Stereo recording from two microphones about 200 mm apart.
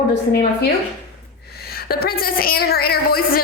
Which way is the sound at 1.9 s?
50° left (ahead or behind).